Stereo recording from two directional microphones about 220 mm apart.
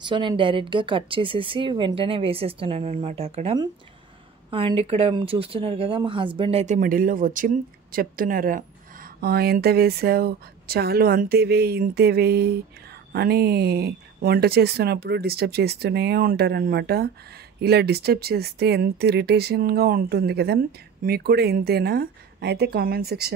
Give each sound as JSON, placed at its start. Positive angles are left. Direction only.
{"t": 0.0, "sound": "speech", "side_deg": -20}